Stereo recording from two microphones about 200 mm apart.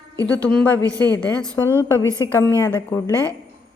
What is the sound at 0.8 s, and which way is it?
Speech, 20° right (ahead or behind).